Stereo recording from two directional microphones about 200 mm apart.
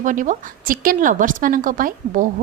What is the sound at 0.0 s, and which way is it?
A woman's voice, 40° right (ahead or behind).